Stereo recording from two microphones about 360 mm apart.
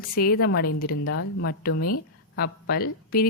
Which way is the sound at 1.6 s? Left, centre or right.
Left.